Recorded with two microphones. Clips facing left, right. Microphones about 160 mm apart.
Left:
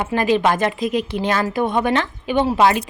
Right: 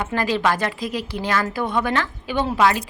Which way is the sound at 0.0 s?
20° left (ahead or behind).